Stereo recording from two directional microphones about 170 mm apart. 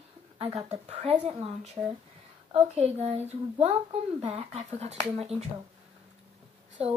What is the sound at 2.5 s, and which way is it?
A child's voice, 40° right (ahead or behind).